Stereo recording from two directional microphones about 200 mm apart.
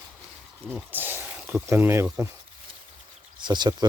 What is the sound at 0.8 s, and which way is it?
Speech, 10° right (ahead or behind).